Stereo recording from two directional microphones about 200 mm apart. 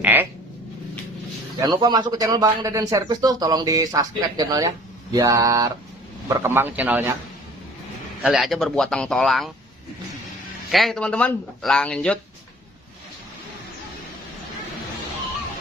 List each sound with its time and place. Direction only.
0.0 s a man's voice: 10° right (ahead or behind)
1.6 s a man's voice: 20° right (ahead or behind)
8.2 s speech: centre (ahead or behind)
10.7 s speech: centre (ahead or behind)